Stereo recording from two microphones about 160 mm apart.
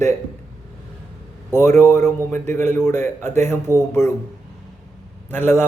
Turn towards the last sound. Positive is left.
turn(degrees=15)  # may be behind; listen again after turning